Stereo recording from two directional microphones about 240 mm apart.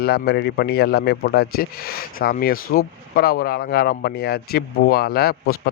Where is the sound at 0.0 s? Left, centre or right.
Left.